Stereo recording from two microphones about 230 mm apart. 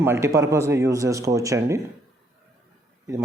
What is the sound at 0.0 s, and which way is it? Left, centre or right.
Speech, centre.